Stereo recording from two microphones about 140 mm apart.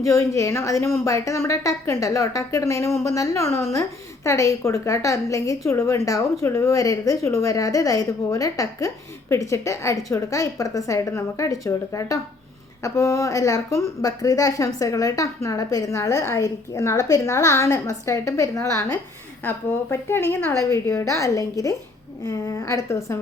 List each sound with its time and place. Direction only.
0.0 s a woman's voice: 20° left (ahead or behind)